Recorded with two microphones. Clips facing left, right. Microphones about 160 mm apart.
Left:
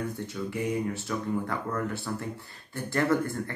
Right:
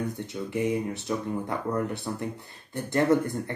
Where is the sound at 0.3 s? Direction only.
20° right (ahead or behind).